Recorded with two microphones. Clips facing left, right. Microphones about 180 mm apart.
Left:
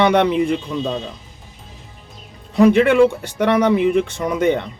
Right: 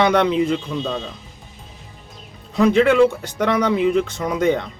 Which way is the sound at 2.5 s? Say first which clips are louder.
Left 2 dB; 60° left (ahead or behind).